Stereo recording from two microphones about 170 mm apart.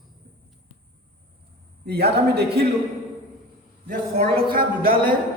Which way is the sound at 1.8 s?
70° right (ahead or behind).